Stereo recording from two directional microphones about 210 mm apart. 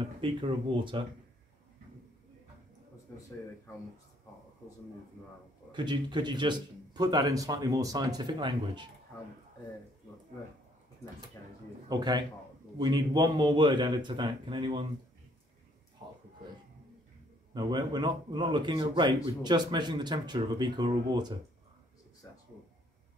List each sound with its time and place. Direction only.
0.2 s speech: 25° right (ahead or behind)
3.1 s a man's voice: 10° left (ahead or behind)
5.7 s speech: 20° right (ahead or behind)
11.9 s speech: 20° right (ahead or behind)
16.0 s a sound: 25° right (ahead or behind)
17.6 s speech: 20° right (ahead or behind)